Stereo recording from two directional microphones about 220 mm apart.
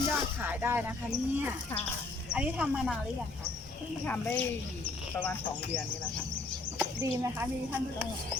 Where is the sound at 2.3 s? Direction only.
5° right (ahead or behind).